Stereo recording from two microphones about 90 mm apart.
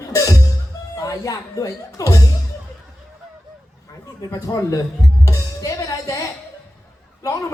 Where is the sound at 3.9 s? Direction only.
45° left (ahead or behind).